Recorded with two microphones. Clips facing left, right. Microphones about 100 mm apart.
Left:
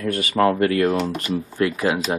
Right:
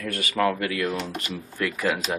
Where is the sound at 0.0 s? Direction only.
30° left (ahead or behind).